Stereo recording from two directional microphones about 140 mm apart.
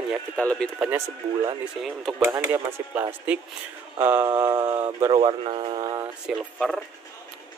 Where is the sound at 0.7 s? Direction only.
10° right (ahead or behind).